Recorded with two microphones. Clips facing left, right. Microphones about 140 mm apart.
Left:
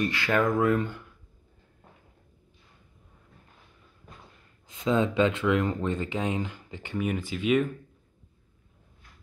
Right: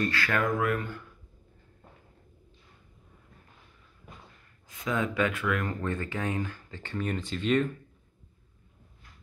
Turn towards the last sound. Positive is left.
turn(degrees=5)  # may be behind; listen again after turning